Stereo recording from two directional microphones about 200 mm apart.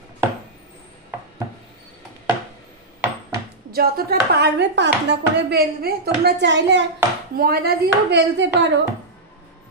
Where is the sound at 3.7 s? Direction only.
50° right (ahead or behind).